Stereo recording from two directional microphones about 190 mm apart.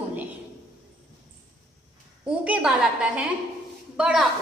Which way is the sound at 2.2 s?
5° right (ahead or behind).